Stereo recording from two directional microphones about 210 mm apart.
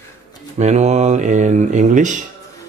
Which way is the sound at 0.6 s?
35° right (ahead or behind).